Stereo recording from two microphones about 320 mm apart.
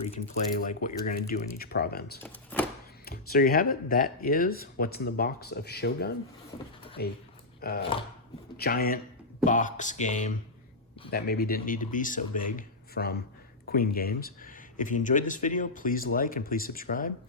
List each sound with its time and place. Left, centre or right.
0.1 s speech: left
2.2 s speech: centre
3.1 s speech: left